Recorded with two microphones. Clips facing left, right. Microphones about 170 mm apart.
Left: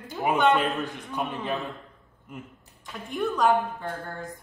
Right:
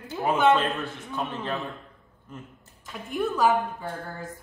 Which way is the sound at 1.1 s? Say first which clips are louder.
Left 1 dB; 15° left (ahead or behind).